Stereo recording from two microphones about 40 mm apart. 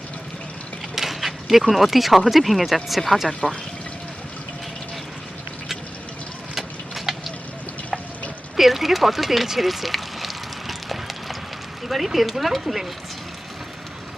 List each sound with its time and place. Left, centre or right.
0.9 s speech: centre
3.4 s speech: centre
6.5 s vehicle: centre
8.5 s a sound: centre
11.9 s speech: centre